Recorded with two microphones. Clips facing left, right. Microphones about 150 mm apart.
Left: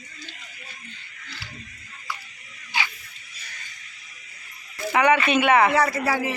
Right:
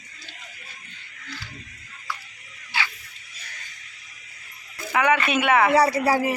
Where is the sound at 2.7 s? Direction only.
15° left (ahead or behind).